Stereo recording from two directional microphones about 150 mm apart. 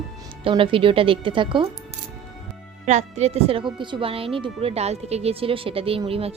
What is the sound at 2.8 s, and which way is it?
Speech, 50° right (ahead or behind).